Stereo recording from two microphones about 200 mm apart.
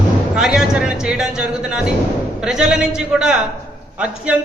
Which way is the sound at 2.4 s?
5° right (ahead or behind).